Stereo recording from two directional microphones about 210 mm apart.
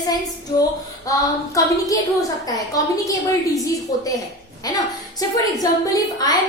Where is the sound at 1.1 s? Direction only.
15° left (ahead or behind).